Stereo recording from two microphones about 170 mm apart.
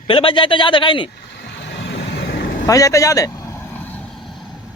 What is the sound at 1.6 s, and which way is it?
Vehicle, 90° left.